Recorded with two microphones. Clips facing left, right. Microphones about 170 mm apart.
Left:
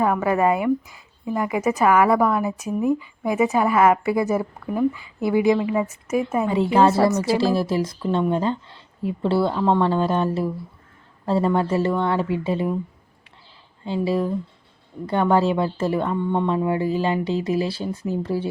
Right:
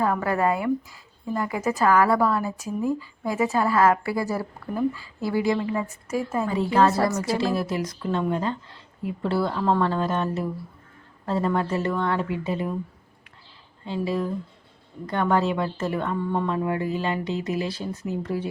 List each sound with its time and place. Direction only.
0.0 s a woman's voice: 15° left (ahead or behind)
13.8 s a woman's voice: 30° left (ahead or behind)